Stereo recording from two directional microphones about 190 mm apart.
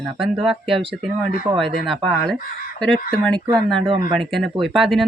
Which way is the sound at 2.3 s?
50° left (ahead or behind).